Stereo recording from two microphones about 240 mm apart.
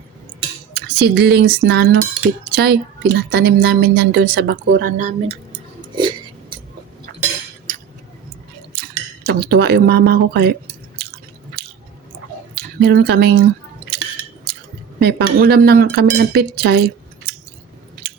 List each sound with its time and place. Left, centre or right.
0.7 s cutlery: right
6.0 s a sound: centre
9.2 s cutlery: right
12.5 s speech: right
15.0 s cutlery: right